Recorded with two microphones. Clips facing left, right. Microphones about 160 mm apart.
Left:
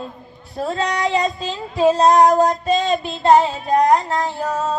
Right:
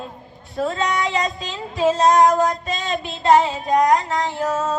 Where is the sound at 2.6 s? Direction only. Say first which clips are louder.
Left 7 dB; 30° left (ahead or behind).